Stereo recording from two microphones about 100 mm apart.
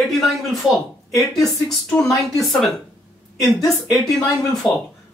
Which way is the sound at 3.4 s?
35° left (ahead or behind).